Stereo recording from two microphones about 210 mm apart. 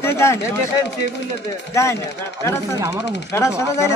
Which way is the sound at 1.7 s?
15° left (ahead or behind).